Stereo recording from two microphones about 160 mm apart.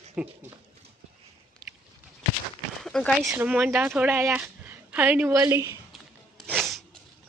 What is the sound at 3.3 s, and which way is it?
Speech, 10° right (ahead or behind).